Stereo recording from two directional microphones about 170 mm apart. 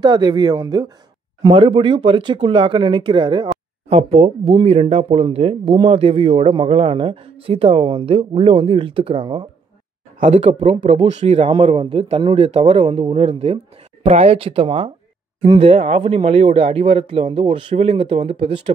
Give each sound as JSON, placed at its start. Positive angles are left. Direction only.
{"t": 0.0, "sound": "speech", "side_deg": -25}
{"t": 10.2, "sound": "speech", "side_deg": -40}